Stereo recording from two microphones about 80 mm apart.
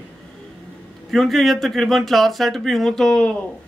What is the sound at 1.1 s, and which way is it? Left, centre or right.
A man's voice, centre.